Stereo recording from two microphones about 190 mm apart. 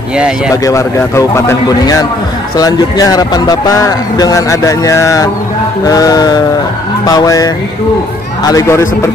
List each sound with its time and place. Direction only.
0.7 s speech: 15° left (ahead or behind)